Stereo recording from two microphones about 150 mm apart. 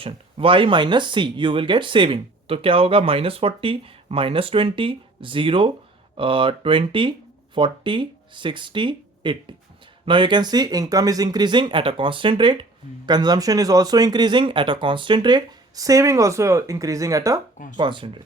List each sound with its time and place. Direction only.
0.0 s speech: 40° right (ahead or behind); by 17.4 s 20° right (ahead or behind)
17.7 s speech: 35° right (ahead or behind)